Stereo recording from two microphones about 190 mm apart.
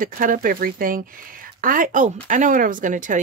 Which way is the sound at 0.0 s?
45° right (ahead or behind).